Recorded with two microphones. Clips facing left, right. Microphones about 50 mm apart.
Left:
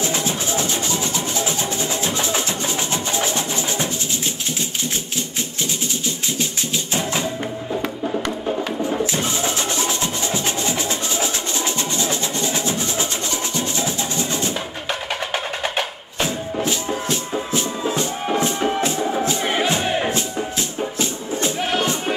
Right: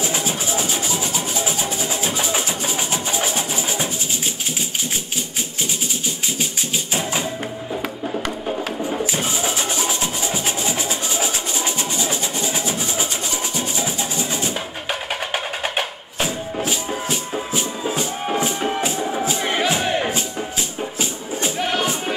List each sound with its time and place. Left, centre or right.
0.0 s music: centre
6.9 s music: centre
7.7 s music: centre
9.0 s music: centre
18.2 s music: centre
21.0 s music: centre
21.5 s music: centre